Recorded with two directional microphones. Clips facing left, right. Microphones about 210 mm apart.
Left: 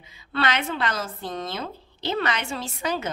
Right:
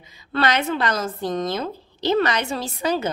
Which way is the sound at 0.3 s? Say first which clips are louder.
Right 4 dB; 40° right (ahead or behind).